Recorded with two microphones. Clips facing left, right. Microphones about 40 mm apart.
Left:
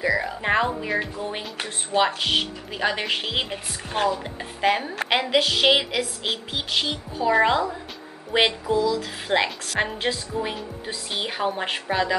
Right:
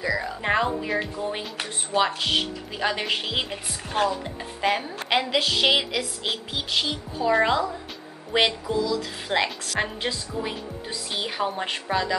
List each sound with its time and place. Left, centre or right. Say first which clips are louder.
0.0 s music: left 3 dB; centre
0.4 s music: left 1 dB; centre
0.9 s speech: even; centre